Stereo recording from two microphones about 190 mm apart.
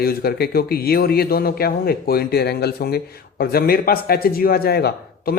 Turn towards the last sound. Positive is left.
turn(degrees=55)  # may be behind; listen again after turning